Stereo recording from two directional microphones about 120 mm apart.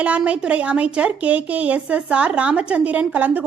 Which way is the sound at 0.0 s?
10° right (ahead or behind).